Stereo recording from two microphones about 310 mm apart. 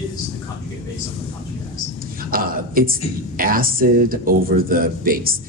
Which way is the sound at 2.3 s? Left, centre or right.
Right.